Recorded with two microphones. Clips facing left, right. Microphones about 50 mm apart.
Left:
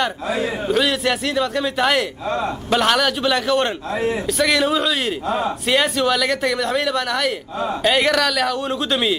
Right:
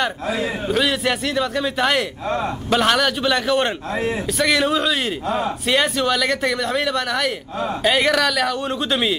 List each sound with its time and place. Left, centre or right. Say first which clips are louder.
0.7 s speech: left 1 dB; centre
2.2 s speech: even; centre
2.7 s speech: even; centre